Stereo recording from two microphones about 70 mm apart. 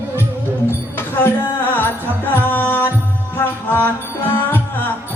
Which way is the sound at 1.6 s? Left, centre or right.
Left.